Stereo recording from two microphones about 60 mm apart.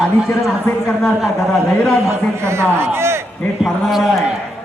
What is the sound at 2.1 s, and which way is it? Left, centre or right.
A man's voice, right.